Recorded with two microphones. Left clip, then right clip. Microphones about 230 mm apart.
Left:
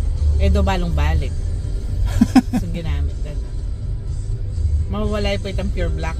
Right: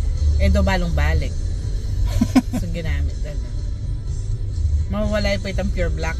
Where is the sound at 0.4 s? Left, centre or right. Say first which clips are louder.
Even; centre.